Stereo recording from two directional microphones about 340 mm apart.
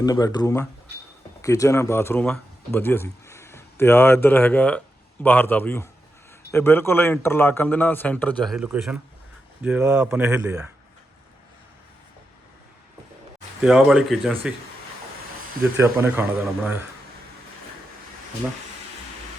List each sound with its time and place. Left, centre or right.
0.0 s a man's voice: centre
13.6 s a man's voice: centre
15.6 s speech: centre